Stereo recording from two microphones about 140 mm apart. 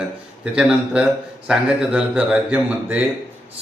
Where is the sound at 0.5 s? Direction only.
5° right (ahead or behind).